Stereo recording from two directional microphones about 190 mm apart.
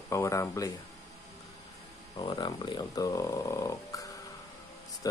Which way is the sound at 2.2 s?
25° left (ahead or behind).